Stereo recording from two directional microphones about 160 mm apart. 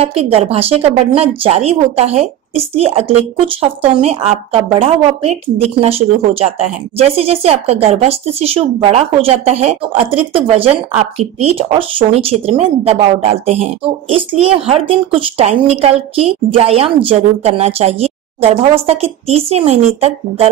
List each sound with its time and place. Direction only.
0.0 s speech: 40° right (ahead or behind)